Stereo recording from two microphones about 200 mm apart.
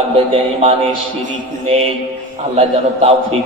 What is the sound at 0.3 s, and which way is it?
A man's voice, 30° right (ahead or behind).